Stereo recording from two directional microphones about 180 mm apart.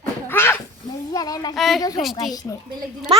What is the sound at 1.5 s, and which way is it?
Speech, centre (ahead or behind).